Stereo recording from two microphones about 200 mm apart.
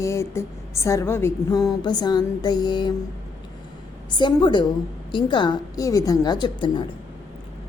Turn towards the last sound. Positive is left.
turn(degrees=20)  # may be behind; listen again after turning